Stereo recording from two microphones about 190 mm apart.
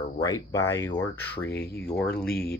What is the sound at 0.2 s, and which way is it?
Speech, 20° left (ahead or behind).